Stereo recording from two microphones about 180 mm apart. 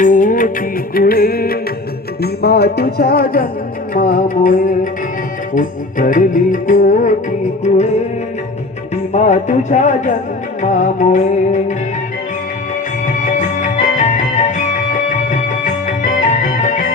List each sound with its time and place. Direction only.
0.0 s music: 45° left (ahead or behind)
9.1 s music: 40° left (ahead or behind)
13.2 s music: 45° left (ahead or behind)